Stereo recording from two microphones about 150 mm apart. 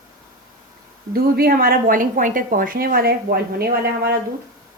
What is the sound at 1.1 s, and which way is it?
A woman's voice, 90° right.